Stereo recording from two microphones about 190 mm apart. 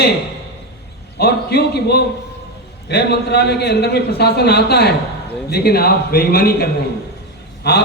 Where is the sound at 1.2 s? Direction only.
55° left (ahead or behind).